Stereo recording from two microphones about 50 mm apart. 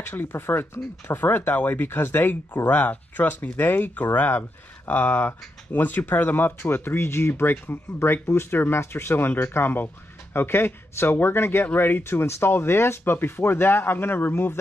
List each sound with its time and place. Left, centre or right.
0.1 s speech: left
11.6 s speech: left